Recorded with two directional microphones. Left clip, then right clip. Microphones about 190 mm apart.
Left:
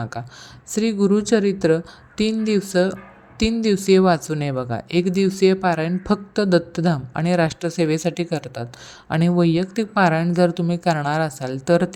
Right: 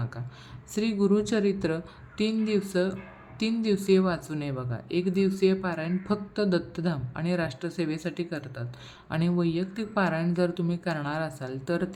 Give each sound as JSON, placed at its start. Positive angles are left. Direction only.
{"t": 0.7, "sound": "a woman's voice", "side_deg": 30}